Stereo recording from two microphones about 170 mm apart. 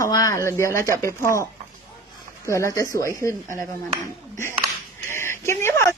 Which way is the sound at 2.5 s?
15° left (ahead or behind).